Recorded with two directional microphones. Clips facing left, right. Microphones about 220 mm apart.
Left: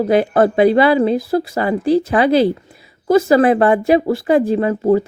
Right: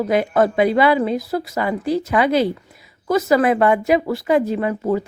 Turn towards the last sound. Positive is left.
turn(degrees=30)  # may be behind; listen again after turning